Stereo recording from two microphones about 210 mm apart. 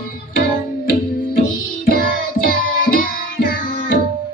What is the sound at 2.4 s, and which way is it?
Music, 45° left (ahead or behind).